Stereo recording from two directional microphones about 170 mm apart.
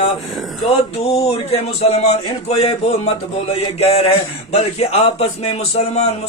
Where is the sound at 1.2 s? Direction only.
35° left (ahead or behind).